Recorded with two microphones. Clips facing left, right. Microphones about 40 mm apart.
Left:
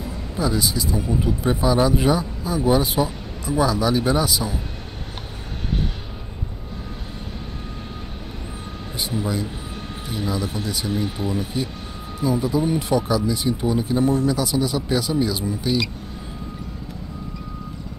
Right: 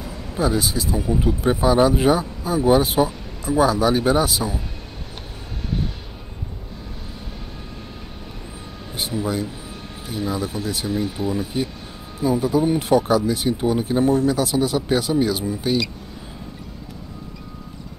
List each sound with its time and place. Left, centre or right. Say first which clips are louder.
0.4 s speech: right 2 dB; right
0.9 s speech: right 3 dB; centre
1.2 s speech: right 3 dB; right
9.2 s speech: right 1 dB; right
11.1 s speech: right 1 dB; left
12.2 s speech: right 2 dB; right